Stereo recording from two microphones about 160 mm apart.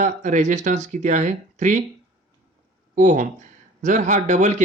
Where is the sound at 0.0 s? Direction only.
50° right (ahead or behind).